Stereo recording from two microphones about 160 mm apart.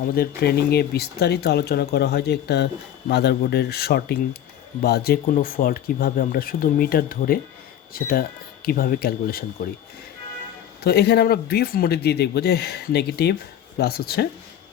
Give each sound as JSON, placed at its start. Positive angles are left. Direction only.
{"t": 0.0, "sound": "speech", "side_deg": 70}
{"t": 10.8, "sound": "speech", "side_deg": 90}
{"t": 13.7, "sound": "speech", "side_deg": 75}